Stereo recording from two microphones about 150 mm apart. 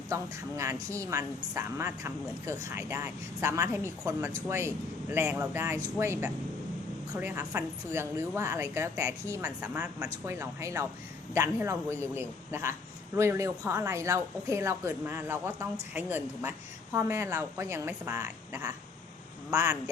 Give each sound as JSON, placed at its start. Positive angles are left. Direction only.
{"t": 0.1, "sound": "a woman's voice", "side_deg": -20}